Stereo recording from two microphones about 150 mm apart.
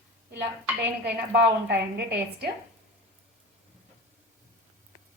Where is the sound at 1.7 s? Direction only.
90° right.